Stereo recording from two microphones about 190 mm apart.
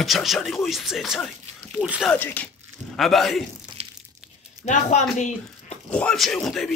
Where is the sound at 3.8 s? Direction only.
35° right (ahead or behind).